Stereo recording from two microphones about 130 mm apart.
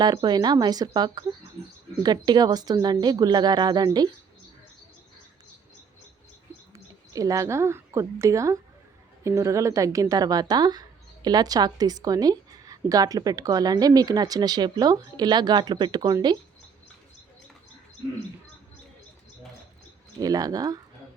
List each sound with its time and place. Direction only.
0.0 s a woman's voice: 35° right (ahead or behind)
6.7 s a woman's voice: 25° right (ahead or behind)
20.1 s speech: 30° right (ahead or behind)